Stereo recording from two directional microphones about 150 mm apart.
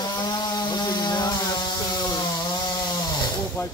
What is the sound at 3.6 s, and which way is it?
Hiss, 15° left (ahead or behind).